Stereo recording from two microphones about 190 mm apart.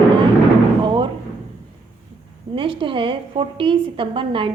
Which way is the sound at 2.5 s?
25° right (ahead or behind).